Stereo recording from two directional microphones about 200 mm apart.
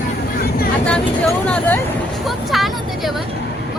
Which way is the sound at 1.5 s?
5° left (ahead or behind).